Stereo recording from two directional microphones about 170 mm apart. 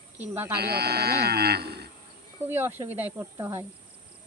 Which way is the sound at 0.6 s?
70° right (ahead or behind).